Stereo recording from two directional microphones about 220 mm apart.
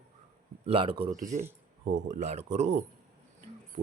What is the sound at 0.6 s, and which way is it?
Speech, 25° right (ahead or behind).